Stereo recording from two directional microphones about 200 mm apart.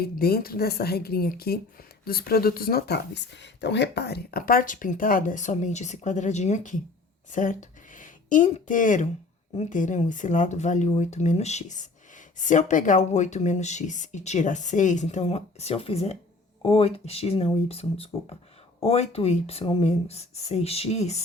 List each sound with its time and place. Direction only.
0.0 s speech: 50° left (ahead or behind); by 21.2 s 30° left (ahead or behind)